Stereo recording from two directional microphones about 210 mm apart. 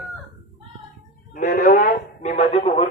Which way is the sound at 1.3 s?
40° left (ahead or behind).